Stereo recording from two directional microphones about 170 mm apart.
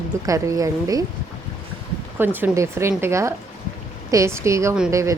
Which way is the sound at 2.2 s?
10° right (ahead or behind).